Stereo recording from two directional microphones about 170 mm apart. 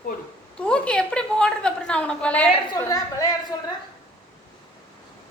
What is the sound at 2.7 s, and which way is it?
Speech, 20° left (ahead or behind).